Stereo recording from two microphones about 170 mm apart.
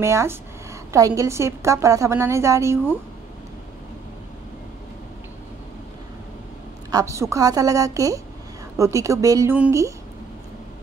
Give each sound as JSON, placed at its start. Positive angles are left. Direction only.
{"t": 0.0, "sound": "a woman's voice", "side_deg": -15}
{"t": 6.9, "sound": "a woman's voice", "side_deg": -20}